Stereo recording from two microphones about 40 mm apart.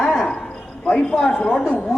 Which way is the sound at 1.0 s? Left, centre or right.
Left.